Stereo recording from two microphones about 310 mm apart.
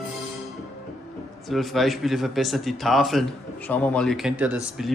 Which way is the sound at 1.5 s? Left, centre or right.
Centre.